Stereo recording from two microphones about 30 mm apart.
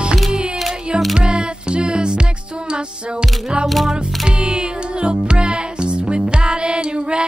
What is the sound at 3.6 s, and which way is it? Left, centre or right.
Music, centre.